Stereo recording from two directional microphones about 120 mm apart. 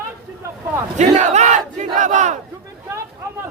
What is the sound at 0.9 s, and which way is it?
Battle cry, 75° right (ahead or behind).